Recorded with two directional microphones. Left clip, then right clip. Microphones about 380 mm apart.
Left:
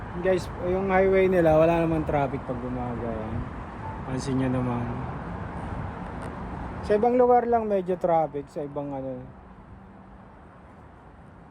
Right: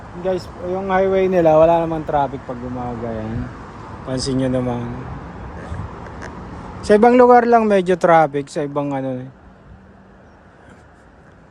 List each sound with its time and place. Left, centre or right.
0.3 s speech: centre
4.1 s speech: centre
6.8 s speech: right
8.7 s speech: right